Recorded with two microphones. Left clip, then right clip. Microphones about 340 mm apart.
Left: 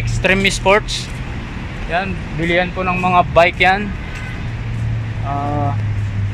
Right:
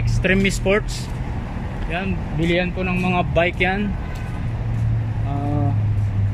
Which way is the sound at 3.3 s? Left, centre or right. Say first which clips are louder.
Left 6 dB; centre.